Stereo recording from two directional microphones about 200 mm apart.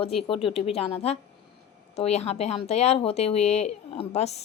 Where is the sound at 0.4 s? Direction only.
30° left (ahead or behind).